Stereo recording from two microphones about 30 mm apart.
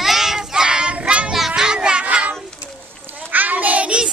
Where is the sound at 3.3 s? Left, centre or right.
Right.